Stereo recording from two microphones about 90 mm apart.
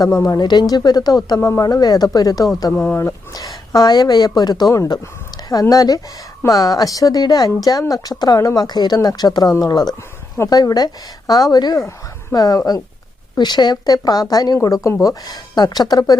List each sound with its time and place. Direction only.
0.0 s speech: 35° left (ahead or behind)
0.3 s a woman's voice: 55° left (ahead or behind)
1.4 s a woman's voice: 35° left (ahead or behind)
2.7 s speech: 25° left (ahead or behind)
3.3 s a woman's voice: 45° left (ahead or behind)